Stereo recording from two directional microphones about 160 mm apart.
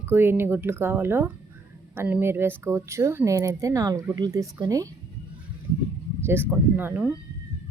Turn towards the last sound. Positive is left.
turn(degrees=-10)  # may be behind; listen again after turning